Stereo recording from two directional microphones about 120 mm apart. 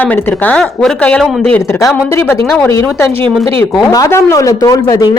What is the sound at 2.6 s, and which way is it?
Speech, 20° left (ahead or behind).